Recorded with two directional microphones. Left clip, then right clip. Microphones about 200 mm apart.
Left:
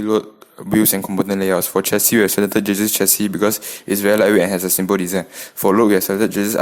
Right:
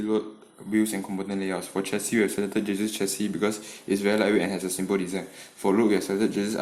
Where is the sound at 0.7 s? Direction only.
50° left (ahead or behind).